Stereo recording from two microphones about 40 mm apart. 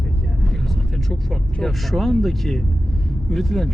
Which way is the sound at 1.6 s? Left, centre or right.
Centre.